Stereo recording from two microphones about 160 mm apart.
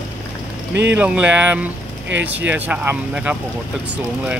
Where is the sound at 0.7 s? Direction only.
90° right.